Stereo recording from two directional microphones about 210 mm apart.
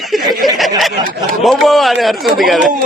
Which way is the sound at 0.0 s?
Centre (ahead or behind).